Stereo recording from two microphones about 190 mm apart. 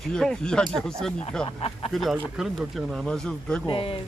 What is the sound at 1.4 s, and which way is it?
Speech, 30° left (ahead or behind).